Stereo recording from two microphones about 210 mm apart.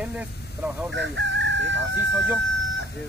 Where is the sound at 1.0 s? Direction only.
60° right (ahead or behind).